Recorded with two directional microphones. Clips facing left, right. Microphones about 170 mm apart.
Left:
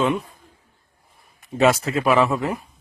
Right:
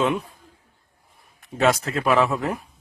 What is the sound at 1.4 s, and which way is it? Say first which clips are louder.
A man's voice: left 3 dB; 5° left (ahead or behind).